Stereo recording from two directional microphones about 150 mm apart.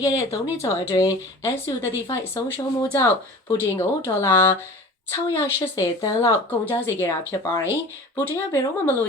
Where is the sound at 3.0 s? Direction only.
15° left (ahead or behind).